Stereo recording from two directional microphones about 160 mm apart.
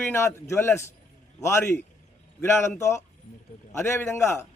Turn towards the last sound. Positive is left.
turn(degrees=15)  # may be behind; listen again after turning